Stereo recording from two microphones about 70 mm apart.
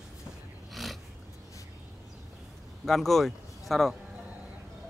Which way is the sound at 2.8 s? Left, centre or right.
Centre.